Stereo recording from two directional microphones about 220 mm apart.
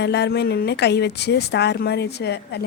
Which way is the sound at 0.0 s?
50° left (ahead or behind).